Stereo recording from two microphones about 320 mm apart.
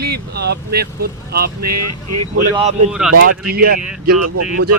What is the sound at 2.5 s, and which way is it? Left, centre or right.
Speech, centre.